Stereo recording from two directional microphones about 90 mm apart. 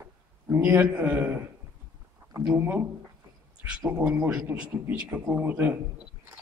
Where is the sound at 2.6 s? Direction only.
20° right (ahead or behind).